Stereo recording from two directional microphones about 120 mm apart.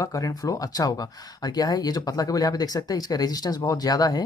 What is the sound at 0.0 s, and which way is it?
Speech, 30° left (ahead or behind).